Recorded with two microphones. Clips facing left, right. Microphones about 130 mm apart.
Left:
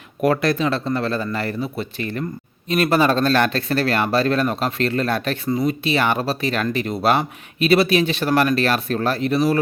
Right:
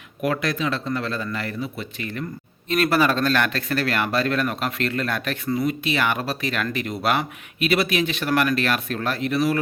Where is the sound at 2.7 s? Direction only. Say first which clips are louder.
Left 3 dB; 20° left (ahead or behind).